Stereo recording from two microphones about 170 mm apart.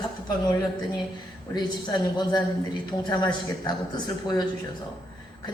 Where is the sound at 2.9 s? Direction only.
25° left (ahead or behind).